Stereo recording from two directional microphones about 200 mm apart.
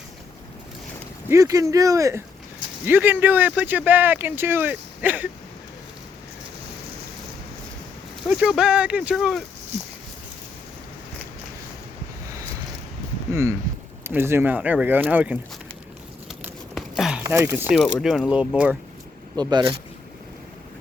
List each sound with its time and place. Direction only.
1.3 s speech: 15° right (ahead or behind)
8.3 s speech: 5° right (ahead or behind)
13.3 s speech: 15° right (ahead or behind)
16.7 s a sound: centre (ahead or behind)
18.0 s speech: 5° right (ahead or behind)
19.4 s speech: 20° right (ahead or behind)